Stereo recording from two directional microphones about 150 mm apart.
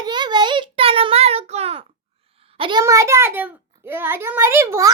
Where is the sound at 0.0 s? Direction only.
30° right (ahead or behind).